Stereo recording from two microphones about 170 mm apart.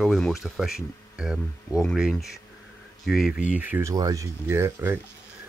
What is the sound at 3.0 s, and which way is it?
Speech, centre (ahead or behind).